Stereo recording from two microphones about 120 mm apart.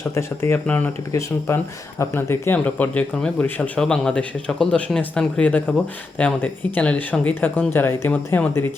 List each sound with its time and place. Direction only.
0.1 s speech: 25° left (ahead or behind)